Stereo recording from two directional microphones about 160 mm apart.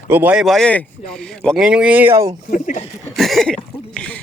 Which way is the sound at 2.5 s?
55° left (ahead or behind).